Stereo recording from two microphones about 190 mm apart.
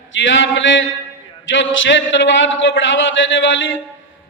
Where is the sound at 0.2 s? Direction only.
75° left (ahead or behind).